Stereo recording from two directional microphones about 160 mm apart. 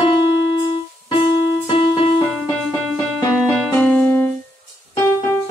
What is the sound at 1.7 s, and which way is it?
Music, 35° left (ahead or behind).